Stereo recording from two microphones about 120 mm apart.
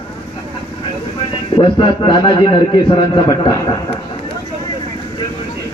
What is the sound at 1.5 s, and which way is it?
A man's voice, 40° left (ahead or behind).